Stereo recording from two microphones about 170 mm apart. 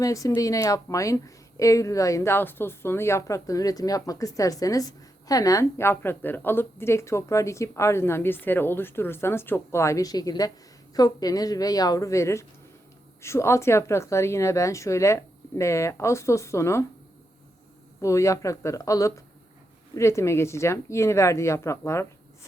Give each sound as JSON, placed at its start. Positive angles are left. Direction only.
{"t": 0.0, "sound": "a woman's voice", "side_deg": 20}
{"t": 18.0, "sound": "a woman's voice", "side_deg": 20}